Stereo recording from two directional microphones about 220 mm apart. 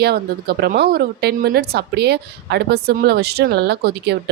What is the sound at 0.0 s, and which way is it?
Speech, 45° right (ahead or behind).